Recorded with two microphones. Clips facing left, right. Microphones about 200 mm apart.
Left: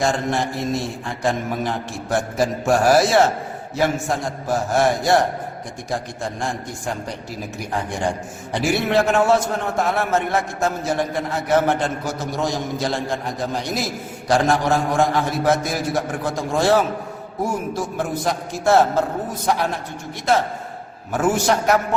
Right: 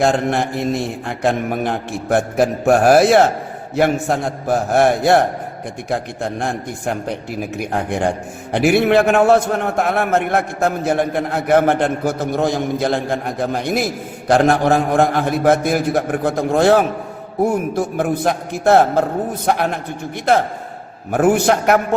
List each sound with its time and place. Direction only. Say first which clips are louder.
0.0 s a man's voice: right 4 dB; 60° right (ahead or behind)
21.1 s a man's voice: right 5 dB; 60° right (ahead or behind)